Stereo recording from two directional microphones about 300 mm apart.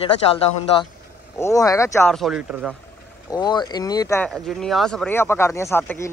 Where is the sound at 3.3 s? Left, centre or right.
Centre.